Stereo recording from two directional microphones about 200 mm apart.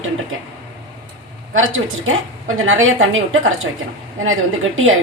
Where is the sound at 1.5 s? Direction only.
85° right.